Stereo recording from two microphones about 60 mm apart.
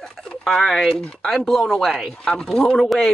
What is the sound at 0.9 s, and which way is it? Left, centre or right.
Speech, centre.